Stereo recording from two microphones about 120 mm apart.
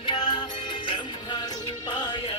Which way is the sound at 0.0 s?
45° left (ahead or behind).